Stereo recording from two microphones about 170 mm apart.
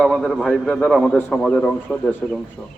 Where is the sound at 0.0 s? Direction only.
Centre (ahead or behind).